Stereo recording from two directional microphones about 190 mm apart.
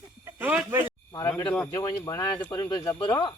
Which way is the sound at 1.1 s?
20° left (ahead or behind).